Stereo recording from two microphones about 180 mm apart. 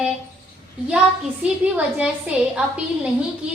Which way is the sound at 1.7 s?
10° right (ahead or behind).